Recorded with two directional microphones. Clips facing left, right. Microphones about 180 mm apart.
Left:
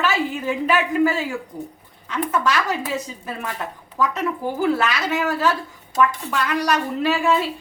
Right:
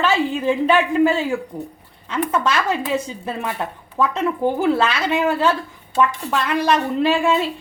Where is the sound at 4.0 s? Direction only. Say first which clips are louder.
Right 4 dB; 30° right (ahead or behind).